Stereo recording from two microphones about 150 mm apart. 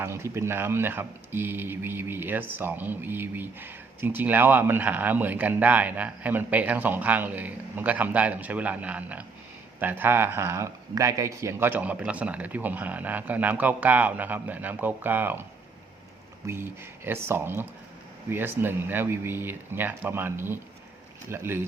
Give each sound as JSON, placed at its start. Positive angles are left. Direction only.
{"t": 0.0, "sound": "speech", "side_deg": -15}
{"t": 16.5, "sound": "speech", "side_deg": -15}